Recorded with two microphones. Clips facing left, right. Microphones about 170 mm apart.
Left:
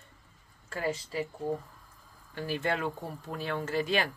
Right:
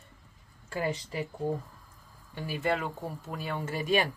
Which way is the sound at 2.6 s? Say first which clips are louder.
Right 3 dB; 5° right (ahead or behind).